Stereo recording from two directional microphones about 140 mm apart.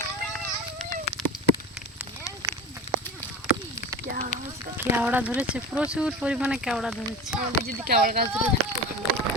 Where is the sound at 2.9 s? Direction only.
45° left (ahead or behind).